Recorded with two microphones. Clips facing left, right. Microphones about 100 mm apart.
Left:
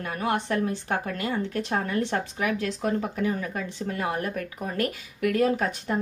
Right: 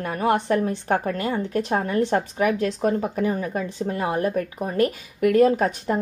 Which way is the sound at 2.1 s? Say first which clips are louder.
Right 6 dB; 35° right (ahead or behind).